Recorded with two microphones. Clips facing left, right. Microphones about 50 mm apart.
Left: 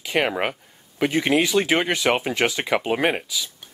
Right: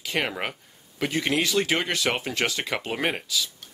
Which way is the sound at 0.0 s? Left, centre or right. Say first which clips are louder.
Left 6 dB; centre.